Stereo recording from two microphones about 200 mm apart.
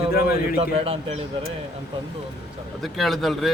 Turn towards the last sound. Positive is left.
turn(degrees=0)  # may be behind; listen again after turning